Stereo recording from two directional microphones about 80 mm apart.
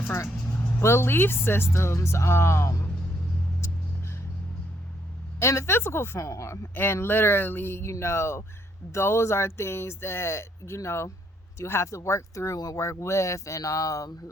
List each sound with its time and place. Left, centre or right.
0.1 s speech: left
5.4 s speech: left